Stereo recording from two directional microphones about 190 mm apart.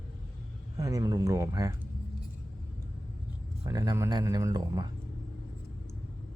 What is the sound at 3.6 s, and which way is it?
Speech, 15° right (ahead or behind).